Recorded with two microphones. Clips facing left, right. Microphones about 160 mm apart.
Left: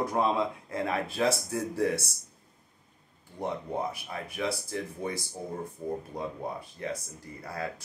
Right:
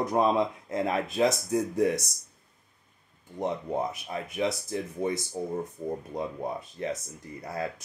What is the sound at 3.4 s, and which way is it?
Speech, 20° right (ahead or behind).